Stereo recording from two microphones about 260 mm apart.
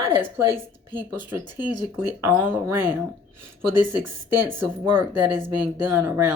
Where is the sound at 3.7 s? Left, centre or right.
Right.